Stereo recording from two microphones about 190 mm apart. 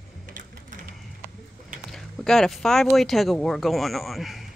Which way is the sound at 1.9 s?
Centre (ahead or behind).